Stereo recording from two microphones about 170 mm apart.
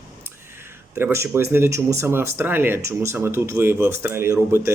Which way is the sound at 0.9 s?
15° right (ahead or behind).